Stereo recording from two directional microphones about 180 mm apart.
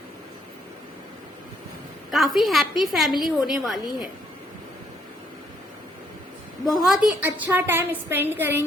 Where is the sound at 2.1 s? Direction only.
Centre (ahead or behind).